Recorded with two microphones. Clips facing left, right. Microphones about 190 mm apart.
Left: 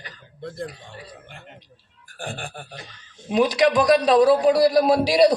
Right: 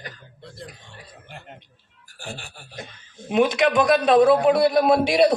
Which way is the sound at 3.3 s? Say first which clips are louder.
Left 1 dB; 35° left (ahead or behind).